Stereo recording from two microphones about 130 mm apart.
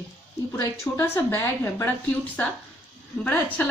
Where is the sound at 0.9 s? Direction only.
25° left (ahead or behind).